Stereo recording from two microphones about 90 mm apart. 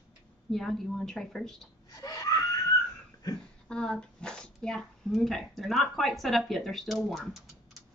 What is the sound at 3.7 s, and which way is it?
Speech, 10° left (ahead or behind).